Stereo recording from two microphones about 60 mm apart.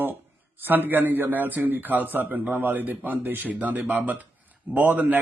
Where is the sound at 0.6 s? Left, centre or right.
Right.